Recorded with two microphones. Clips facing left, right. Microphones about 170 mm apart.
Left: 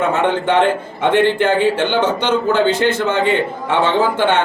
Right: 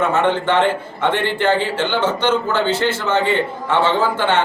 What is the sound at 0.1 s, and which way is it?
A man's voice, 15° left (ahead or behind).